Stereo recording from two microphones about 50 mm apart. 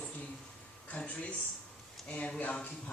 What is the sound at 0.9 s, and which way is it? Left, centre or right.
Speech, left.